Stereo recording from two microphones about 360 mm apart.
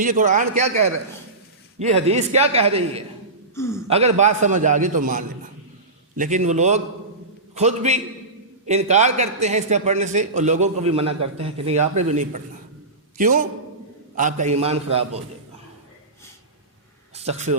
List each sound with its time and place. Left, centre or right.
0.0 s a man's voice: right
3.5 s speech: centre
3.8 s a man's voice: centre
17.2 s speech: centre